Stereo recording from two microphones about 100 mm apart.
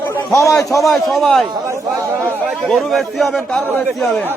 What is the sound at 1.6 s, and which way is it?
Speech, 30° right (ahead or behind).